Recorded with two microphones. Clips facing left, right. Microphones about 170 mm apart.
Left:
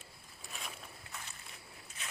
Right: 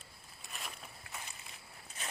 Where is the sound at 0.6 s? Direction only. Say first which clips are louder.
Even; centre (ahead or behind).